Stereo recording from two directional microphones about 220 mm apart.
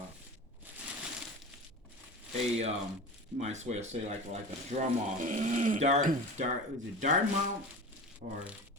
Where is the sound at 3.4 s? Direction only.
30° right (ahead or behind).